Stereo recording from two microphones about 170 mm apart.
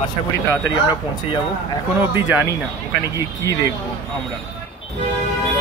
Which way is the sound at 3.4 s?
20° left (ahead or behind).